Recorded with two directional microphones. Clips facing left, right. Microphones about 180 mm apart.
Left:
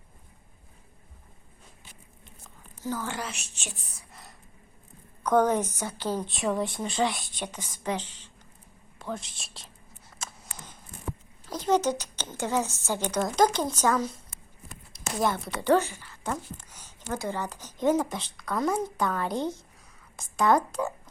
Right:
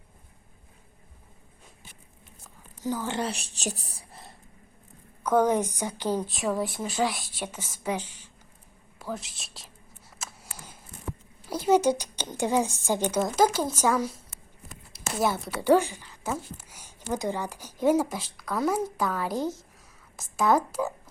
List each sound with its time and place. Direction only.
2.8 s a woman's voice: 15° right (ahead or behind)
3.2 s a woman's voice: 35° right (ahead or behind)
5.2 s a woman's voice: 10° right (ahead or behind)
6.2 s a woman's voice: centre (ahead or behind)
10.2 s a sound: 10° right (ahead or behind)
11.4 s a woman's voice: 10° right (ahead or behind)